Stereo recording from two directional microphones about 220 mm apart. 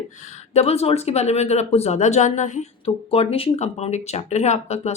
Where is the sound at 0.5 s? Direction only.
30° left (ahead or behind).